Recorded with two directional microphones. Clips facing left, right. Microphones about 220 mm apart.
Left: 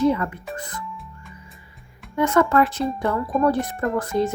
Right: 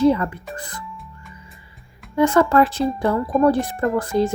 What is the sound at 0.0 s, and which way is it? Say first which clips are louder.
Speech: right 3 dB; 30° right (ahead or behind).